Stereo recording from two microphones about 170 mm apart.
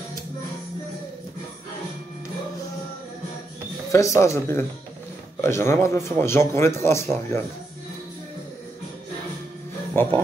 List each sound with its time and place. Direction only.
3.9 s a man's voice: 15° left (ahead or behind)
9.9 s a man's voice: 10° left (ahead or behind)